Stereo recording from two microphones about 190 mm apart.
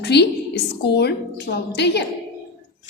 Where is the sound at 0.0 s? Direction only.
60° left (ahead or behind).